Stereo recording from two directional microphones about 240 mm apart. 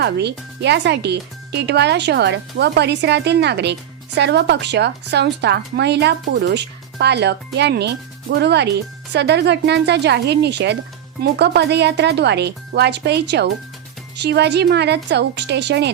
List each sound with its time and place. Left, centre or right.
0.0 s speech: right